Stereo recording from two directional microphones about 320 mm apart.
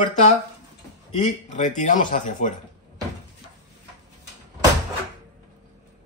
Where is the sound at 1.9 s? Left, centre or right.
Left.